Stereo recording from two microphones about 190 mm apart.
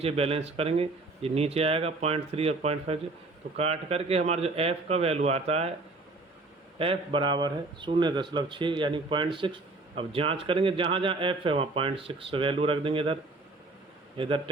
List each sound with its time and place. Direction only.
0.0 s speech: 30° right (ahead or behind)
6.7 s speech: 30° right (ahead or behind)
14.2 s speech: 25° right (ahead or behind)